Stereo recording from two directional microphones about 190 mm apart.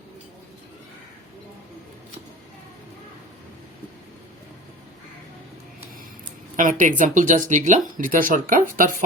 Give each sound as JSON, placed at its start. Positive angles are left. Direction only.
{"t": 6.6, "sound": "speech", "side_deg": -40}